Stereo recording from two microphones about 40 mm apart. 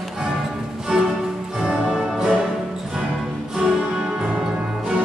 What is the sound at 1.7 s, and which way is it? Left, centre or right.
Music, right.